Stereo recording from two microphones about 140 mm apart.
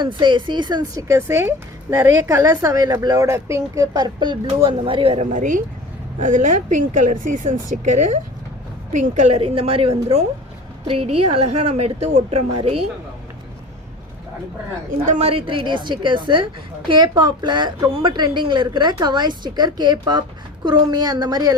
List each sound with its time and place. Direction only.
0.0 s speech: 35° right (ahead or behind)
5.2 s a woman's voice: 65° right (ahead or behind)
9.4 s a woman's voice: 45° right (ahead or behind)
14.8 s speech: 65° right (ahead or behind)
15.2 s a woman's voice: 40° right (ahead or behind)